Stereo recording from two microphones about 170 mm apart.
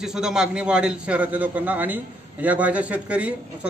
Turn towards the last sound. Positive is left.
turn(degrees=-5)  # may be behind; listen again after turning